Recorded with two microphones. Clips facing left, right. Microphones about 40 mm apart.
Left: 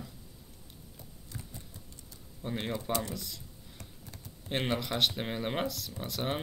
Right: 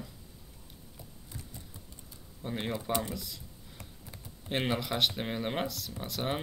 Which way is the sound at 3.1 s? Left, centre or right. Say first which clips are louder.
Right 1 dB; centre.